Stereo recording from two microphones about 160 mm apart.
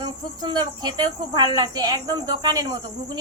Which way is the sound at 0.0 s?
25° right (ahead or behind).